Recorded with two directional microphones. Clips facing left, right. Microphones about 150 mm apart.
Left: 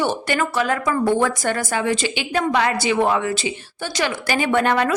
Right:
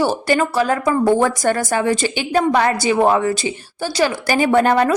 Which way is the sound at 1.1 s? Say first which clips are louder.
Right 4 dB; 40° right (ahead or behind).